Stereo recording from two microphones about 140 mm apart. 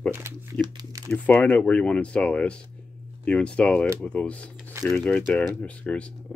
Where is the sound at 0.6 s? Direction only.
30° right (ahead or behind).